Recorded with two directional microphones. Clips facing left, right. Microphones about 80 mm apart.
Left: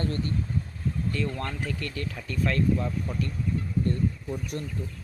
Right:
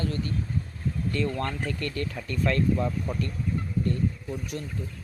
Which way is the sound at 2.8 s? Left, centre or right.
Centre.